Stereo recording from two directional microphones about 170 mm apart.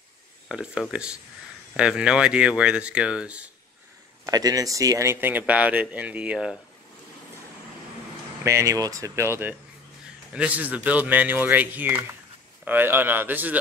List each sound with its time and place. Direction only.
0.5 s speech: 5° right (ahead or behind)
4.3 s speech: 20° right (ahead or behind); by 6.6 s 5° right (ahead or behind)
8.5 s speech: 20° right (ahead or behind)